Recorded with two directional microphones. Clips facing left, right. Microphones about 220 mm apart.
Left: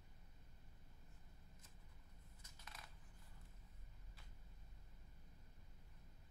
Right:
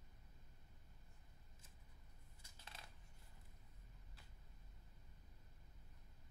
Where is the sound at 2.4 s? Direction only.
30° right (ahead or behind).